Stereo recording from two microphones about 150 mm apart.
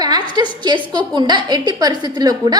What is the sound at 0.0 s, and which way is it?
A woman's voice, 25° right (ahead or behind).